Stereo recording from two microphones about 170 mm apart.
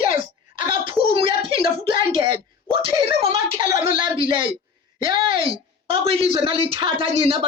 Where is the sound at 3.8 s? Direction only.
30° right (ahead or behind).